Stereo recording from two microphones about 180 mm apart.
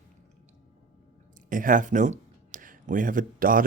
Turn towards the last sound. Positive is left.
turn(degrees=-50)  # may be behind; listen again after turning